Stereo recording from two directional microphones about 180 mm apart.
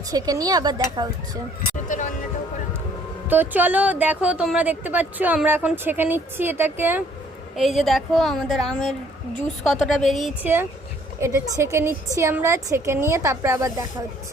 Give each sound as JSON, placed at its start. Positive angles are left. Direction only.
{"t": 0.1, "sound": "speech", "side_deg": -20}
{"t": 1.9, "sound": "music", "side_deg": 45}
{"t": 3.2, "sound": "a woman's voice", "side_deg": -10}
{"t": 7.5, "sound": "a woman's voice", "side_deg": 0}
{"t": 11.2, "sound": "a woman's voice", "side_deg": -15}